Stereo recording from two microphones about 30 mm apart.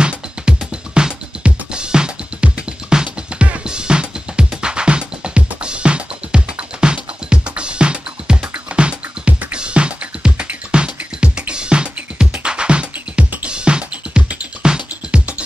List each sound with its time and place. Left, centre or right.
0.0 s music: right
13.2 s music: right
13.5 s music: right